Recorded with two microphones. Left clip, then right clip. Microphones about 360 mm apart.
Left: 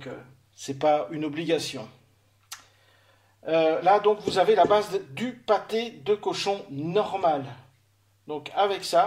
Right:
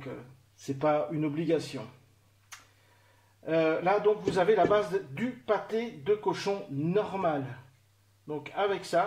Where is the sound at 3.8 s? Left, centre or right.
Left.